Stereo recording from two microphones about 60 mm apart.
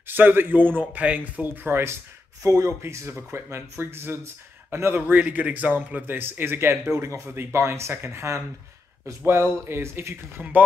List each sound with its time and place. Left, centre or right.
0.0 s a man's voice: right
2.4 s speech: right
4.9 s a man's voice: right